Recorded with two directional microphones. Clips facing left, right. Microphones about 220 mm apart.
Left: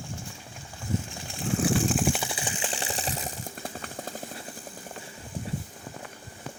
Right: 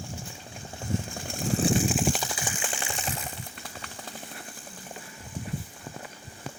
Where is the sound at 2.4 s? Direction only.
25° left (ahead or behind).